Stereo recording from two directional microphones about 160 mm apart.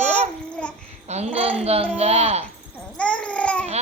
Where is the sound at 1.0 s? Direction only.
45° right (ahead or behind).